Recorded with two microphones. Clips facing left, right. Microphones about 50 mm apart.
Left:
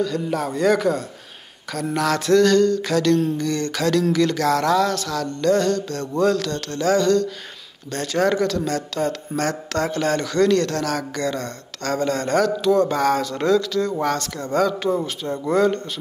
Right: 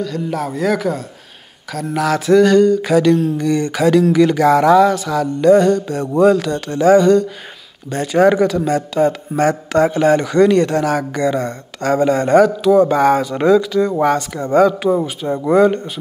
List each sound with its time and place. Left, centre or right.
0.0 s a man's voice: centre